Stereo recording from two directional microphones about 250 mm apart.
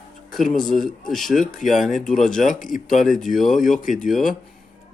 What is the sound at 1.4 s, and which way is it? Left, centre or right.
Speech, left.